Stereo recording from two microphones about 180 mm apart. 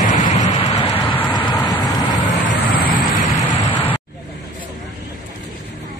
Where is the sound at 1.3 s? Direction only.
25° left (ahead or behind).